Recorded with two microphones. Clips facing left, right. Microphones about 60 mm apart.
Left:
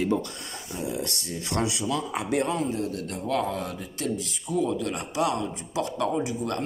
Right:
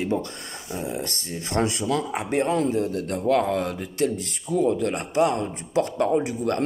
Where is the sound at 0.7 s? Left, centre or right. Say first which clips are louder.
Right 2 dB; right.